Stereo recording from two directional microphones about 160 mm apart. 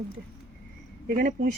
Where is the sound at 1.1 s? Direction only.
55° right (ahead or behind).